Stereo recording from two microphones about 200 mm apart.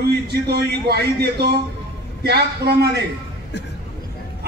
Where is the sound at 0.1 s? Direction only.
55° right (ahead or behind).